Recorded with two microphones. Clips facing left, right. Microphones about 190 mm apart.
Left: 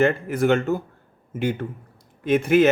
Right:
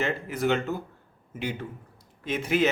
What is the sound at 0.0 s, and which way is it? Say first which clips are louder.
Speech: left 7 dB; 50° left (ahead or behind).